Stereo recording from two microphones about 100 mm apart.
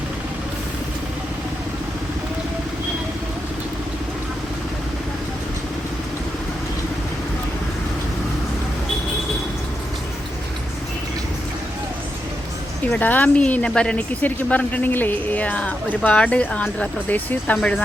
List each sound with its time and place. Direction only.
12.9 s speech: 15° left (ahead or behind)